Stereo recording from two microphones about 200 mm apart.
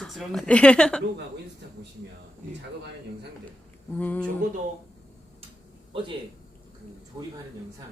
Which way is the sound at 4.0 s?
10° left (ahead or behind).